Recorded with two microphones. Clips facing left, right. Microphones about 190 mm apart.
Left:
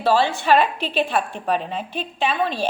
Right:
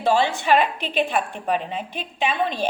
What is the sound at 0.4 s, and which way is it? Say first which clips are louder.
A woman's voice: left 2 dB; 15° right (ahead or behind).